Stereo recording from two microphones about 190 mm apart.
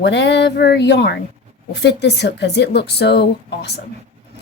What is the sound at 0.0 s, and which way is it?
Speech, 70° left (ahead or behind).